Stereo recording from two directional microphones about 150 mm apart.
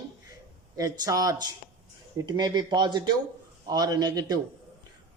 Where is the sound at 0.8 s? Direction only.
25° right (ahead or behind).